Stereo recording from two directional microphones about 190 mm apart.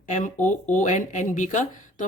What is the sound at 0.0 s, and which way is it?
Speech, 45° left (ahead or behind).